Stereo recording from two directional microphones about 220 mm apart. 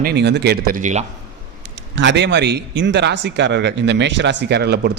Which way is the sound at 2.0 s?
55° right (ahead or behind).